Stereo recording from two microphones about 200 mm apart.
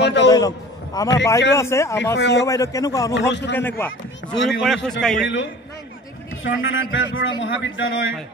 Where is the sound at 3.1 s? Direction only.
60° left (ahead or behind).